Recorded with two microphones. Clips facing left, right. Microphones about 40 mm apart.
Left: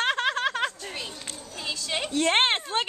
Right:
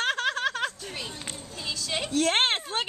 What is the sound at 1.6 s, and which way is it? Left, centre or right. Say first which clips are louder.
A woman's voice: left 1 dB; centre.